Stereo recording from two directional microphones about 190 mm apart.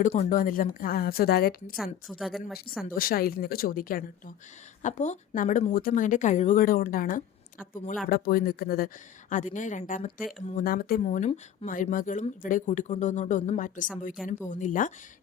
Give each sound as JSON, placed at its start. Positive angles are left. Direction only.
{"t": 0.0, "sound": "a woman's voice", "side_deg": 40}
{"t": 1.7, "sound": "a woman's voice", "side_deg": 0}
{"t": 2.8, "sound": "a woman's voice", "side_deg": 50}